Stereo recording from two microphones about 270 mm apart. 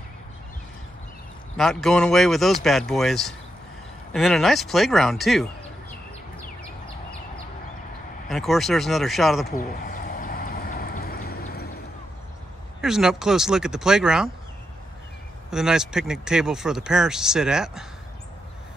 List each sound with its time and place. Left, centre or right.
1.6 s speech: centre
8.3 s speech: centre
9.6 s vehicle: left
12.8 s speech: centre
15.5 s speech: centre